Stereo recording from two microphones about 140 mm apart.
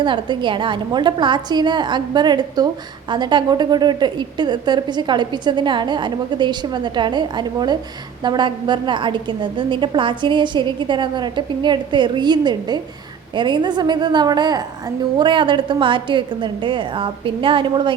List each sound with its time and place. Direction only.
0.0 s a woman's voice: 35° right (ahead or behind)